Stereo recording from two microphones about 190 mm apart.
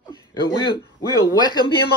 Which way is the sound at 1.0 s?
20° right (ahead or behind).